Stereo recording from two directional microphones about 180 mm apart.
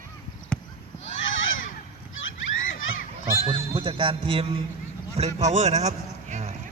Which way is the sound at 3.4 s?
30° right (ahead or behind).